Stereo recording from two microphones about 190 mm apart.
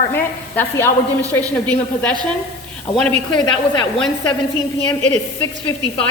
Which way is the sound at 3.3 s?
25° left (ahead or behind).